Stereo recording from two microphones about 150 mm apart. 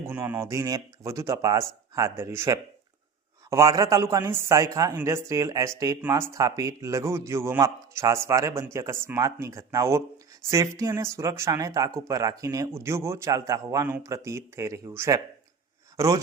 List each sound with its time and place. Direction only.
0.1 s speech: 15° right (ahead or behind)